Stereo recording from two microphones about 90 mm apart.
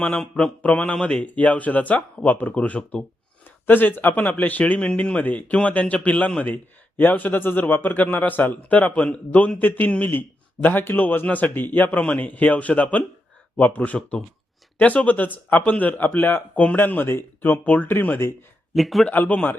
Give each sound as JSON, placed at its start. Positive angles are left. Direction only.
{"t": 0.0, "sound": "speech", "side_deg": 15}
{"t": 18.7, "sound": "speech", "side_deg": 0}
{"t": 19.0, "sound": "speech", "side_deg": 20}